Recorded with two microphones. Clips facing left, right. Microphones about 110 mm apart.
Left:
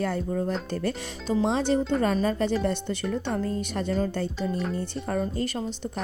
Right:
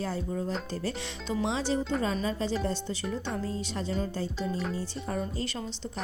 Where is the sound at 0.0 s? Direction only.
60° left (ahead or behind).